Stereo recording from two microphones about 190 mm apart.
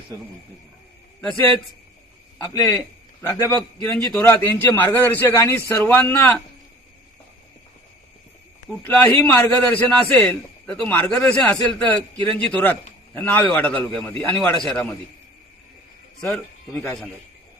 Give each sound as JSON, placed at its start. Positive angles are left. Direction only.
{"t": 1.2, "sound": "a man's voice", "side_deg": 5}
{"t": 2.4, "sound": "a man's voice", "side_deg": 15}
{"t": 8.7, "sound": "a man's voice", "side_deg": 0}
{"t": 9.1, "sound": "a man's voice", "side_deg": 15}
{"t": 16.2, "sound": "speech", "side_deg": 0}